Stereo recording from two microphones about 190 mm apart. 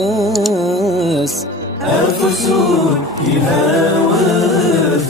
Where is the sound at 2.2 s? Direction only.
Centre (ahead or behind).